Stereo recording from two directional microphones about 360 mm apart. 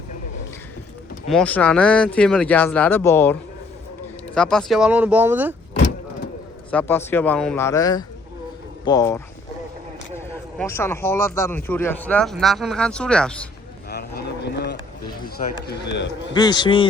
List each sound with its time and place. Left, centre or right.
1.3 s speech: centre
4.4 s speech: centre
6.7 s a man's voice: centre
13.9 s vehicle: left
15.6 s speech: left
16.3 s a man's voice: centre